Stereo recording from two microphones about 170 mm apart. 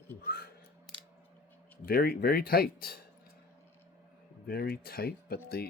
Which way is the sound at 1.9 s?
60° left (ahead or behind).